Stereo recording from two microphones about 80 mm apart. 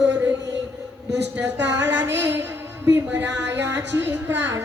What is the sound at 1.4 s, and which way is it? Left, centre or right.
Speech, right.